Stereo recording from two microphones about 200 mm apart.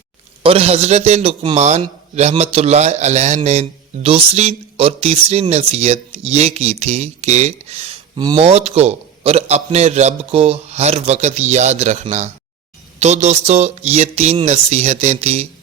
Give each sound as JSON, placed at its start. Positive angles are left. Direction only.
{"t": 0.4, "sound": "a man's voice", "side_deg": -30}